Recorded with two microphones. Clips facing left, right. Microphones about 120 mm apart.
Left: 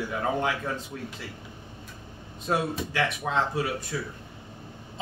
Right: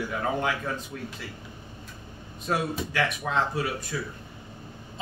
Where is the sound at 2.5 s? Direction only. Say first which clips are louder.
Left 1 dB; 25° left (ahead or behind).